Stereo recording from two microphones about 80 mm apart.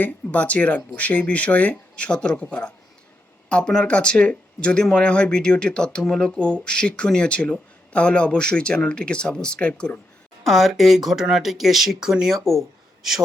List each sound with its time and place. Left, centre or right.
0.0 s speech: centre
10.4 s speech: centre